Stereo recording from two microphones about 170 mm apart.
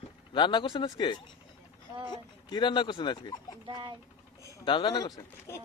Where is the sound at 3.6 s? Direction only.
30° right (ahead or behind).